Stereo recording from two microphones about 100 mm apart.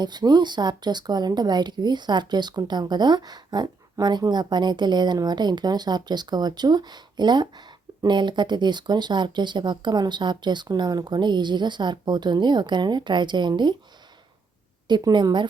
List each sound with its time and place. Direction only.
0.0 s speech: 45° right (ahead or behind)
14.8 s speech: 50° right (ahead or behind)